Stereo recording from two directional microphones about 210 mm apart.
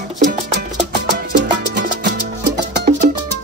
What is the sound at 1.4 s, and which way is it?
Music, 55° right (ahead or behind).